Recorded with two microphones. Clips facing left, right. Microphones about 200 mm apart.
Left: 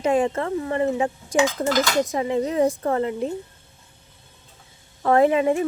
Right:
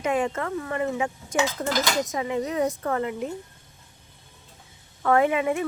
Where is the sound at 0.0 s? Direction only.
30° left (ahead or behind).